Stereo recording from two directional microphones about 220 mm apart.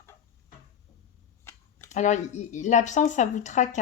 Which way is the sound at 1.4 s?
10° left (ahead or behind).